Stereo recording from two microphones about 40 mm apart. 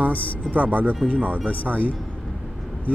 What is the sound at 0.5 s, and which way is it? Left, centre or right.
Speech, right.